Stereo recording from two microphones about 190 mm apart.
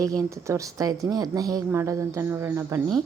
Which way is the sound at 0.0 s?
20° right (ahead or behind).